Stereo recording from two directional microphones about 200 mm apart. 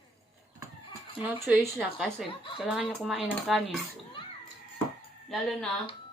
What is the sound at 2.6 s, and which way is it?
Speech, 5° right (ahead or behind).